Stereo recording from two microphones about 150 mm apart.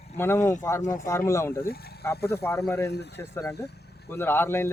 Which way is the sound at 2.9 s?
90° left.